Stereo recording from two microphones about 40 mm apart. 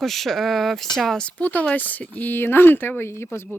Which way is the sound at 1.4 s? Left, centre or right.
Left.